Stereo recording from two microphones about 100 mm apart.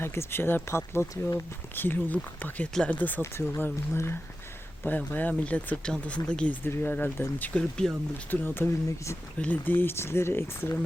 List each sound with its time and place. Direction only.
0.0 s speech: 25° left (ahead or behind)